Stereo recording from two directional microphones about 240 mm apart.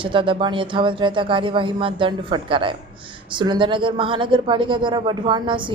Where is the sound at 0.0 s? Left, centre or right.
Right.